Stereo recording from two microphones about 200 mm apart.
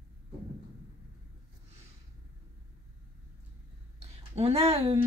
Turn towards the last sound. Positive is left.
turn(degrees=-30)  # may be behind; listen again after turning